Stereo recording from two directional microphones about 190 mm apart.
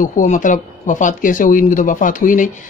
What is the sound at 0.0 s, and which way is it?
Speech, 45° left (ahead or behind).